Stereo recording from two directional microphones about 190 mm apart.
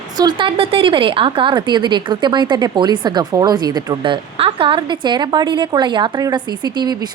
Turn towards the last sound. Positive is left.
turn(degrees=-20)  # may be behind; listen again after turning